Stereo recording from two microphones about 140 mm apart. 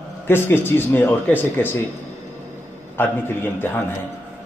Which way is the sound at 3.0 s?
15° left (ahead or behind).